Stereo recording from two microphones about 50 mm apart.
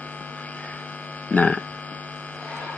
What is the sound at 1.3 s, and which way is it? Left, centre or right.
Speech, left.